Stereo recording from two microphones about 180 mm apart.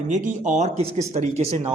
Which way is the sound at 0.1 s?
45° right (ahead or behind).